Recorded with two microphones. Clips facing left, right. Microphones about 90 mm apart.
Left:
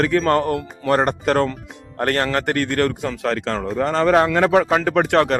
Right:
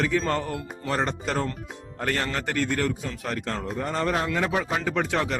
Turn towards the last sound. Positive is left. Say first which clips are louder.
# left 9 dB
turn(degrees=70)  # may be behind; listen again after turning